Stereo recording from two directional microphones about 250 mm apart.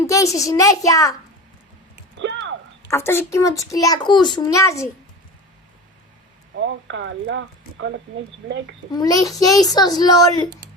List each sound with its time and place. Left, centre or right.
0.0 s a child's voice: centre
2.1 s a sound: right
2.9 s a child's voice: centre
6.8 s speech: right
8.9 s a child's voice: centre